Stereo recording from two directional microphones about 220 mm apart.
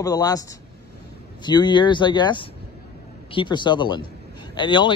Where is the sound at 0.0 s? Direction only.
15° left (ahead or behind).